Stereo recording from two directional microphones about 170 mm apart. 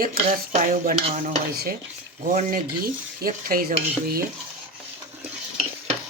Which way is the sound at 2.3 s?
60° right (ahead or behind).